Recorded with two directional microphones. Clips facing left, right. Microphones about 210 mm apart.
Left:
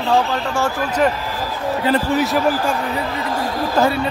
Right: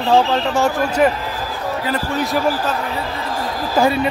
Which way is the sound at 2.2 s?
Centre (ahead or behind).